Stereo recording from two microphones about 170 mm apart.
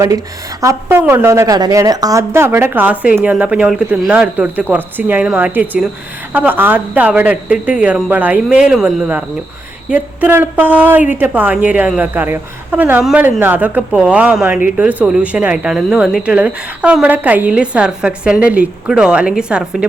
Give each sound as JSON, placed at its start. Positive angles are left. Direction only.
{"t": 0.6, "sound": "speech", "side_deg": -15}